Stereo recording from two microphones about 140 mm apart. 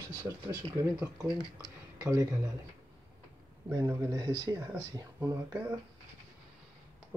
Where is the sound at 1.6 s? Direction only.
25° right (ahead or behind).